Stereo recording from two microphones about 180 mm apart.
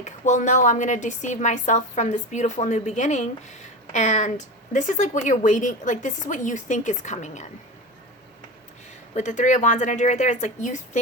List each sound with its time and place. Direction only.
0.0 s a woman's voice: 45° left (ahead or behind)
9.1 s a woman's voice: 40° left (ahead or behind)